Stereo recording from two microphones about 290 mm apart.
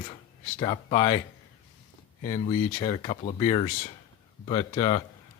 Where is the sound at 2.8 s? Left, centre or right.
Centre.